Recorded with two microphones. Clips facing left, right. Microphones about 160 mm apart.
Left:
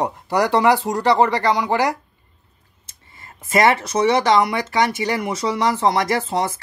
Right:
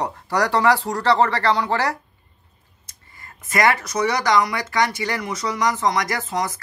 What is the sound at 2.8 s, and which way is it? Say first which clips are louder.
Speech: left 1 dB; 25° left (ahead or behind).